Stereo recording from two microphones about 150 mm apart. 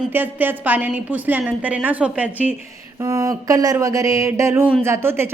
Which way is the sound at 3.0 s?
20° right (ahead or behind).